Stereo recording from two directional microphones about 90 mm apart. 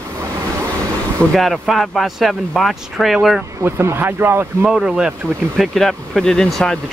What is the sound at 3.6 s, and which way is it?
Speech, 25° right (ahead or behind).